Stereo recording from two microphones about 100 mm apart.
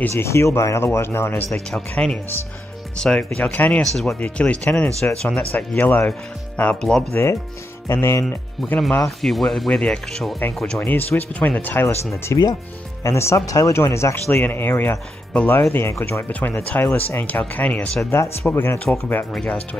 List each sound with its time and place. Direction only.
0.1 s speech: 25° left (ahead or behind)
1.5 s speech: 5° left (ahead or behind)
3.8 s speech: 5° left (ahead or behind)
4.2 s speech: 15° left (ahead or behind)
5.5 s speech: 20° left (ahead or behind)
7.9 s speech: 25° left (ahead or behind)
8.7 s speech: 5° left (ahead or behind)
10.8 s speech: 20° left (ahead or behind)
12.3 s speech: 30° left (ahead or behind); by 18.0 s 15° left (ahead or behind)
18.1 s speech: 25° left (ahead or behind)
19.3 s speech: 10° left (ahead or behind)